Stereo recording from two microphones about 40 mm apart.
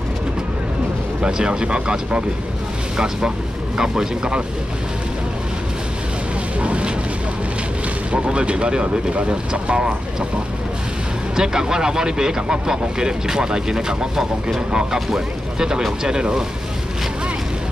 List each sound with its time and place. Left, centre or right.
1.2 s speech: right
6.6 s a sound: right
8.1 s speech: right
11.3 s speech: centre